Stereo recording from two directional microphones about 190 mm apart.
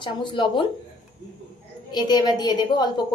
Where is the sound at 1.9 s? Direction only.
20° left (ahead or behind).